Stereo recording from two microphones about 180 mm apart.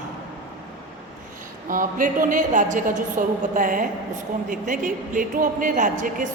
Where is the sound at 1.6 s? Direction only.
50° right (ahead or behind).